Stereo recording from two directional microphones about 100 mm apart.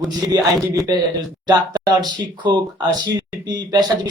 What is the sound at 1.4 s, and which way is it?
Speech, 40° right (ahead or behind).